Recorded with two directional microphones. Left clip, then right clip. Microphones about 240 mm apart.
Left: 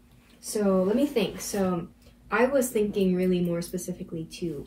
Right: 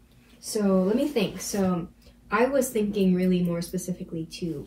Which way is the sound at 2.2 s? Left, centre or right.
Centre.